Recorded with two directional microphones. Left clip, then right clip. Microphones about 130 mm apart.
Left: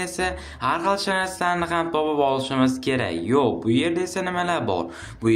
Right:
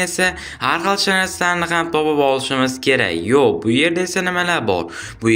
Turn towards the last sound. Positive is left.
turn(degrees=-20)  # may be behind; listen again after turning